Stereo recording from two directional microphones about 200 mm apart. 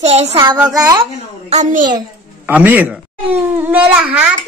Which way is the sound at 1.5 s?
35° right (ahead or behind).